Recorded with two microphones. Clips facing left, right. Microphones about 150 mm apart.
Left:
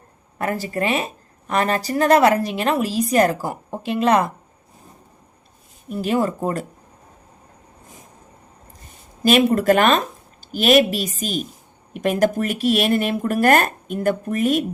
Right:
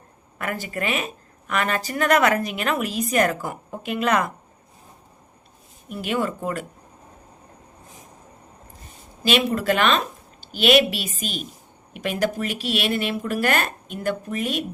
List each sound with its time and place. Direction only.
0.3 s a woman's voice: 35° left (ahead or behind)
5.9 s a woman's voice: 35° left (ahead or behind)
9.2 s a woman's voice: 45° left (ahead or behind)